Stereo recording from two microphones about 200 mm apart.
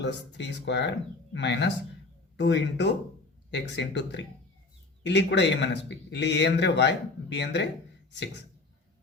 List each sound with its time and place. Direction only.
0.0 s speech: 60° left (ahead or behind)